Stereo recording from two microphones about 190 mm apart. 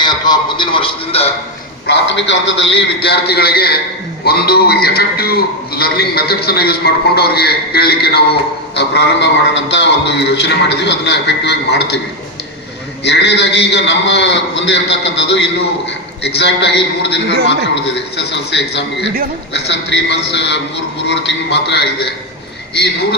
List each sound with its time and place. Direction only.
0.0 s a man's voice: 25° left (ahead or behind)
1.9 s a man's voice: 70° left (ahead or behind)
3.0 s a man's voice: 60° left (ahead or behind)
13.1 s a man's voice: 60° left (ahead or behind)